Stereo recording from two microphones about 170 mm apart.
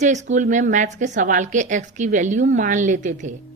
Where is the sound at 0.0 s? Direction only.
45° right (ahead or behind).